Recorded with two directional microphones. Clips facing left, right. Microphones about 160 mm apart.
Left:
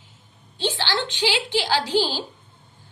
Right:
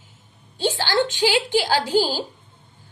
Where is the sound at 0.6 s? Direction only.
45° right (ahead or behind).